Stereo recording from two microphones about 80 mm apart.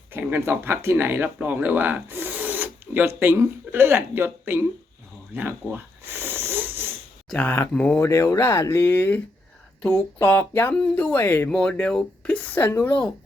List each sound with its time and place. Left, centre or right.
0.1 s speech: right
5.3 s a sound: right
7.7 s speech: centre
7.9 s speech: left
11.4 s speech: centre